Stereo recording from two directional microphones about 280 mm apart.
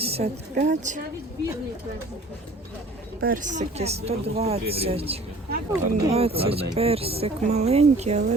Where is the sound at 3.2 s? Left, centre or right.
Right.